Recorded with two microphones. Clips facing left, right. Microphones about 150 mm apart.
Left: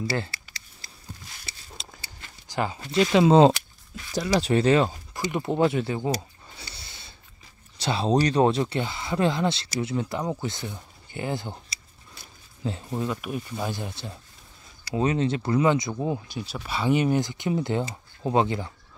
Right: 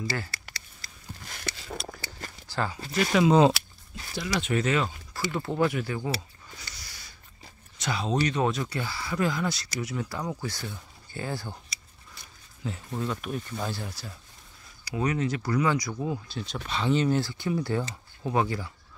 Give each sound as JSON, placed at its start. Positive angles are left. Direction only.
{"t": 1.2, "sound": "a sound", "side_deg": -65}
{"t": 2.4, "sound": "speech", "side_deg": 15}
{"t": 5.1, "sound": "speech", "side_deg": 20}
{"t": 6.6, "sound": "a sound", "side_deg": 30}
{"t": 7.7, "sound": "speech", "side_deg": 30}
{"t": 12.6, "sound": "speech", "side_deg": 25}
{"t": 13.0, "sound": "speech", "side_deg": 10}
{"t": 16.3, "sound": "speech", "side_deg": 10}